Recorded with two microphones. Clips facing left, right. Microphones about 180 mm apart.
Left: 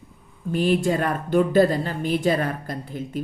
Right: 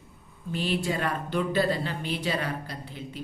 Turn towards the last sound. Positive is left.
turn(degrees=50)  # may be behind; listen again after turning